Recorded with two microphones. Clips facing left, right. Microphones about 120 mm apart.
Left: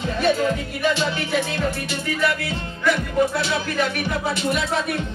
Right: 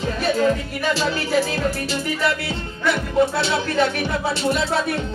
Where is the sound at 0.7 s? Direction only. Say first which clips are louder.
Even; 35° right (ahead or behind).